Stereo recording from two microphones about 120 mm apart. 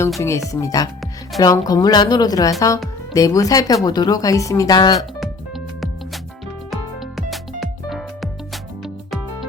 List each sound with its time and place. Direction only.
0.2 s speech: 25° left (ahead or behind)
6.7 s music: centre (ahead or behind)